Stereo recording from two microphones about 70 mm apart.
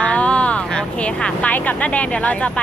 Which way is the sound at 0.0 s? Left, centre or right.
Centre.